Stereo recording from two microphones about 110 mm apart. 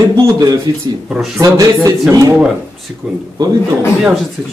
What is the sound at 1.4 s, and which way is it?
Speech, 30° right (ahead or behind).